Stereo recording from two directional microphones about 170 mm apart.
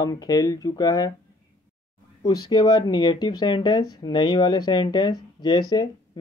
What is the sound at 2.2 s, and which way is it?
Speech, 20° left (ahead or behind).